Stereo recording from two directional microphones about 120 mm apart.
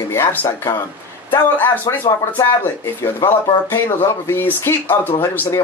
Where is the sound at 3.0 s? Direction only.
20° left (ahead or behind).